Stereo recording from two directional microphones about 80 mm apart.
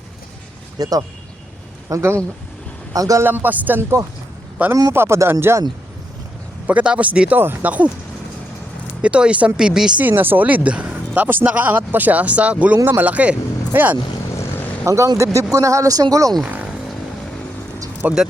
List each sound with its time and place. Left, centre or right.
0.8 s speech: right
1.9 s speech: right
2.9 s speech: right
3.2 s speech: right
6.7 s speech: centre
9.0 s speech: centre
10.0 s speech: right
14.8 s speech: right
16.4 s speech: centre
18.0 s speech: right